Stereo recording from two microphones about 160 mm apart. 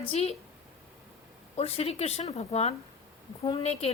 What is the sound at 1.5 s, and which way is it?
A woman's voice, 40° left (ahead or behind).